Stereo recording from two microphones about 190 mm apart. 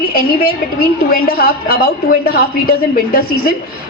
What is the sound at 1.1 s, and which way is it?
A woman's voice, 50° left (ahead or behind).